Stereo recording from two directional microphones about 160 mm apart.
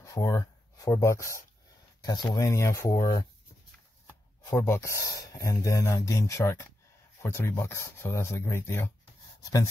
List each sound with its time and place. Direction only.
0.0 s speech: 20° left (ahead or behind)
4.4 s speech: 15° left (ahead or behind)